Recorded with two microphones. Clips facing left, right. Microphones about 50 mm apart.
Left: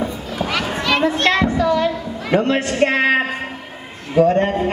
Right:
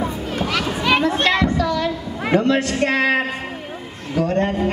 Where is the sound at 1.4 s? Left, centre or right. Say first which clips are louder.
Left 3 dB; left.